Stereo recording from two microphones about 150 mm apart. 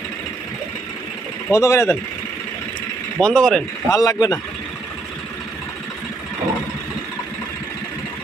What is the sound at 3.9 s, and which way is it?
Speech, 25° left (ahead or behind).